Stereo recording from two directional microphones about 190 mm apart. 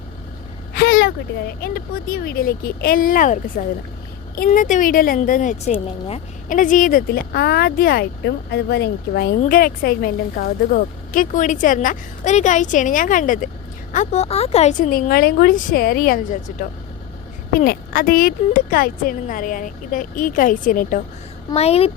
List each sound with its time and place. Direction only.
0.7 s vehicle: 50° left (ahead or behind)
1.6 s speech: 50° left (ahead or behind)
9.4 s speech: 50° left (ahead or behind)
17.5 s speech: 50° left (ahead or behind)
21.5 s speech: 35° left (ahead or behind)